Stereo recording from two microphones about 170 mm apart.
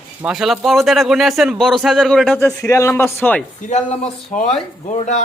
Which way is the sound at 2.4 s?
15° left (ahead or behind).